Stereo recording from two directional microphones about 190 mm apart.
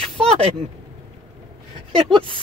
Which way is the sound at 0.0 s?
5° left (ahead or behind).